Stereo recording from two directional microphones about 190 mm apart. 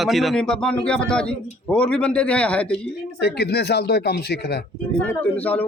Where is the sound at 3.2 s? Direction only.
60° left (ahead or behind).